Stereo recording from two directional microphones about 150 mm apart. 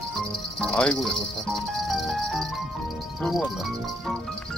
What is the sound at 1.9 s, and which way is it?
Music, centre (ahead or behind).